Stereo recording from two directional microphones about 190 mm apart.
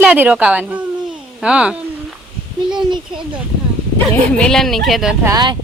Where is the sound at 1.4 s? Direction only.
5° right (ahead or behind).